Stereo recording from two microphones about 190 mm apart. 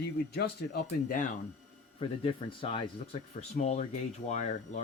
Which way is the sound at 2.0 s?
30° left (ahead or behind).